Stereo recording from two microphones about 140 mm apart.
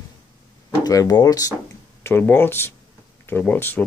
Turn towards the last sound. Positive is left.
turn(degrees=15)  # may be behind; listen again after turning